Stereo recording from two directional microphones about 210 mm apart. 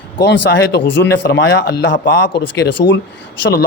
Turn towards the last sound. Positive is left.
turn(degrees=50)  # may be behind; listen again after turning